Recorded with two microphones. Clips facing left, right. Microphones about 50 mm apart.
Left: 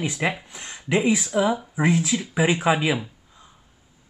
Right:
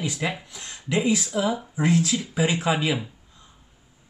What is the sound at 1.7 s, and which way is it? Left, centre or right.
Speech, centre.